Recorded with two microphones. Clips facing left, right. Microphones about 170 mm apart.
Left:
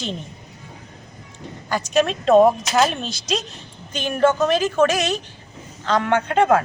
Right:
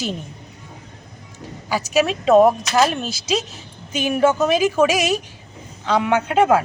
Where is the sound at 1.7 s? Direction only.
5° right (ahead or behind).